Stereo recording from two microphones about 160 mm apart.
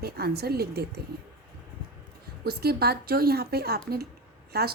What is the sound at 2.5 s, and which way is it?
Speech, 75° right (ahead or behind).